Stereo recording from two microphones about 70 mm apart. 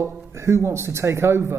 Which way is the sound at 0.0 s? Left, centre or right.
Right.